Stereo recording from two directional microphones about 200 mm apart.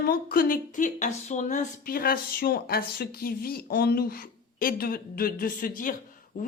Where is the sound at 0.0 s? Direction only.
50° left (ahead or behind).